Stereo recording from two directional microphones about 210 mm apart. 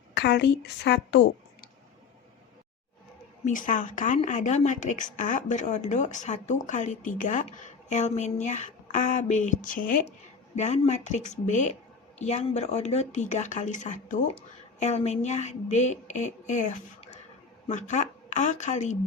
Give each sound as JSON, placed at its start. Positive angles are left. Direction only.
{"t": 0.1, "sound": "a woman's voice", "side_deg": 55}
{"t": 3.4, "sound": "speech", "side_deg": 40}